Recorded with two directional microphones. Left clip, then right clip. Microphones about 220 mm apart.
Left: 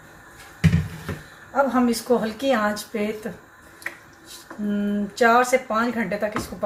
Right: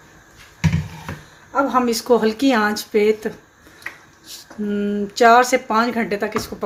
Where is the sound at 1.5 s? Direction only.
50° right (ahead or behind).